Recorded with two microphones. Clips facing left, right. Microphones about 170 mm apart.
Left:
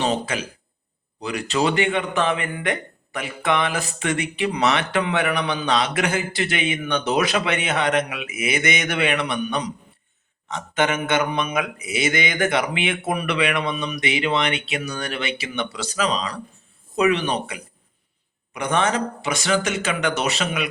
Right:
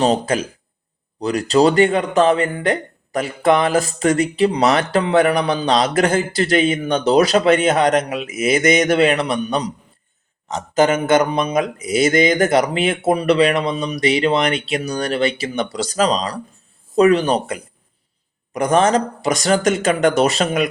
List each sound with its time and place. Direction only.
0.0 s speech: 40° right (ahead or behind)